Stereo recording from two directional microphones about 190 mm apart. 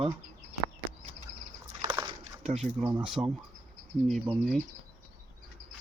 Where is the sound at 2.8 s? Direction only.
5° right (ahead or behind).